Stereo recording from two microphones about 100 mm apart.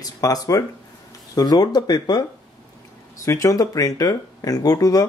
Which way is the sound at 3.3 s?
35° left (ahead or behind).